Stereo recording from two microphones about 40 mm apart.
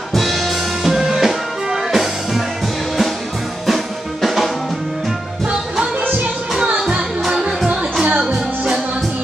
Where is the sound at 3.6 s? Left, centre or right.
Centre.